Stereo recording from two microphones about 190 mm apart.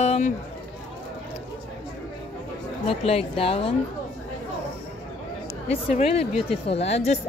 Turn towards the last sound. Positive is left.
turn(degrees=35)  # may be behind; listen again after turning